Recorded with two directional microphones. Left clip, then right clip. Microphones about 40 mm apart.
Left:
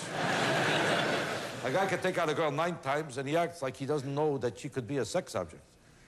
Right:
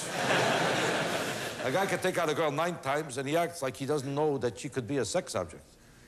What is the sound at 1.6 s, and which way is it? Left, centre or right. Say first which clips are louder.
A man's voice: right 1 dB; left.